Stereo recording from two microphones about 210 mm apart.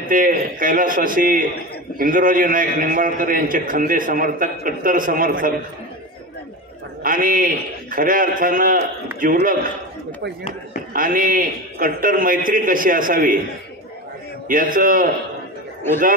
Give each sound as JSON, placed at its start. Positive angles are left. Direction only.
{"t": 0.0, "sound": "a man's voice", "side_deg": -40}
{"t": 7.0, "sound": "a man's voice", "side_deg": -40}
{"t": 10.9, "sound": "a man's voice", "side_deg": -40}
{"t": 14.5, "sound": "a man's voice", "side_deg": -40}